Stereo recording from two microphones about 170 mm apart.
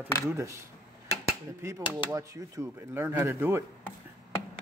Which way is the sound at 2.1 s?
15° right (ahead or behind).